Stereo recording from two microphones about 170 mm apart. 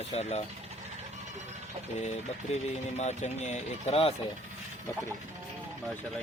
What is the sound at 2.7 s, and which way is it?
Speech, 40° left (ahead or behind).